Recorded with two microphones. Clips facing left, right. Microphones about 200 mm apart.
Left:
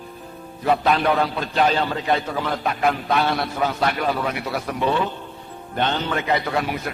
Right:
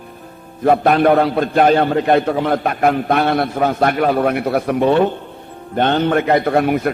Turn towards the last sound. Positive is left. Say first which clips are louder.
# right 8 dB
turn(degrees=-55)  # may be behind; listen again after turning